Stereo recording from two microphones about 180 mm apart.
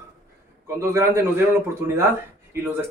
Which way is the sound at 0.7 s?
15° right (ahead or behind).